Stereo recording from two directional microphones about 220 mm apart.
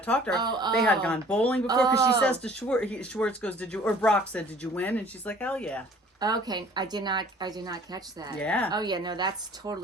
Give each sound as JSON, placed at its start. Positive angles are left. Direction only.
{"t": 0.0, "sound": "speech", "side_deg": 5}
{"t": 0.3, "sound": "a woman's voice", "side_deg": -20}
{"t": 0.9, "sound": "speech", "side_deg": 5}
{"t": 1.6, "sound": "a man's voice", "side_deg": -15}
{"t": 2.2, "sound": "speech", "side_deg": 5}
{"t": 6.1, "sound": "a woman's voice", "side_deg": -15}
{"t": 8.4, "sound": "speech", "side_deg": 5}
{"t": 8.7, "sound": "a woman's voice", "side_deg": -20}